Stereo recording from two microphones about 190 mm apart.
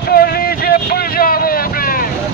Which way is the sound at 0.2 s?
50° left (ahead or behind).